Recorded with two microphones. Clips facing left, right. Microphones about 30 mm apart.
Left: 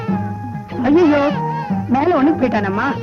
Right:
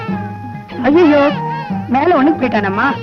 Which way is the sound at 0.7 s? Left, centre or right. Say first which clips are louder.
Right 3 dB; right.